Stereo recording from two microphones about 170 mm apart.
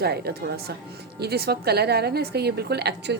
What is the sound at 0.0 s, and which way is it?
A woman's voice, 70° right (ahead or behind).